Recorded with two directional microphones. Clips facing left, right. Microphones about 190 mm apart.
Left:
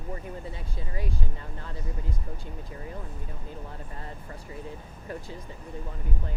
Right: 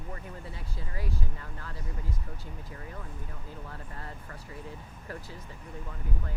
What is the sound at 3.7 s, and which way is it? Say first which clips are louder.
Speech: left 2 dB; 20° left (ahead or behind).